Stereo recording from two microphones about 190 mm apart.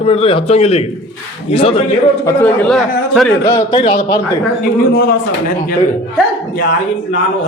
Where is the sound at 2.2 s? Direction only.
15° left (ahead or behind).